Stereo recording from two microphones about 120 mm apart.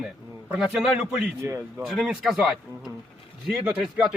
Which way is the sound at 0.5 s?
5° right (ahead or behind).